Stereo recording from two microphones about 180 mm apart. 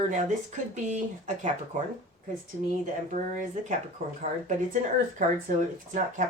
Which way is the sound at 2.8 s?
45° right (ahead or behind).